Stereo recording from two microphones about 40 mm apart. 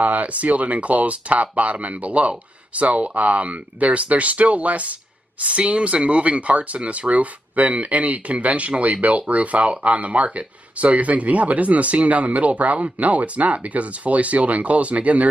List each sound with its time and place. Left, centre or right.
0.0 s speech: right